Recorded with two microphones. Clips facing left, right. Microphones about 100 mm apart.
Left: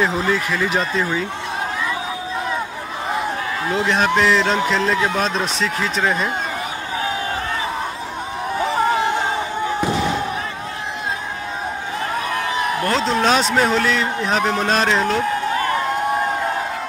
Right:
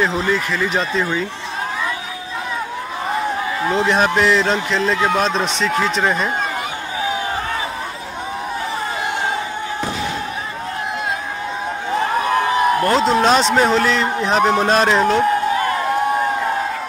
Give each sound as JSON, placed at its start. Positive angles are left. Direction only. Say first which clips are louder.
{"t": 0.0, "sound": "a man's voice", "louder": "right 1 dB", "side_deg": 5}
{"t": 3.6, "sound": "a man's voice", "louder": "right 2 dB", "side_deg": -5}
{"t": 12.3, "sound": "a sound", "louder": "right 7 dB", "side_deg": -30}
{"t": 12.9, "sound": "a man's voice", "louder": "even", "side_deg": -5}